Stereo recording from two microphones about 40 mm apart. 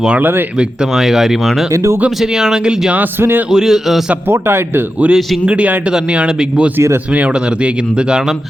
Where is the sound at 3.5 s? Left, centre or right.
Centre.